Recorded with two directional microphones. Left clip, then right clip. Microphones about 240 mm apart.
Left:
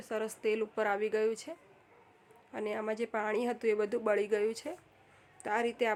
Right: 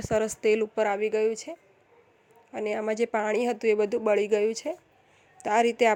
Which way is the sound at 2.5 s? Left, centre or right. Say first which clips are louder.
Right 7 dB; centre.